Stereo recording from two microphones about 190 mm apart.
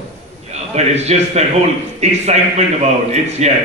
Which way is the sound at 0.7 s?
35° right (ahead or behind).